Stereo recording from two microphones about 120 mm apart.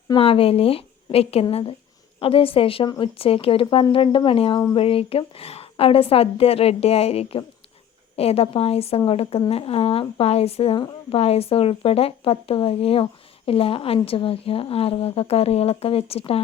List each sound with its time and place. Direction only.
0.2 s a woman's voice: 55° left (ahead or behind)